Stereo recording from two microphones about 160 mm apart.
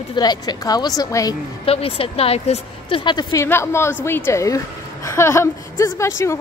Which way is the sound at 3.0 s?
30° left (ahead or behind).